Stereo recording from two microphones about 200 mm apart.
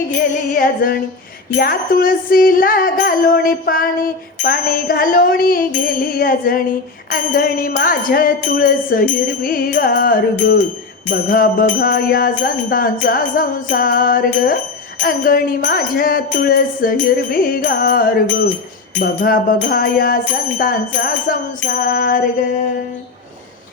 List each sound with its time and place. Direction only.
0.5 s music: 45° left (ahead or behind)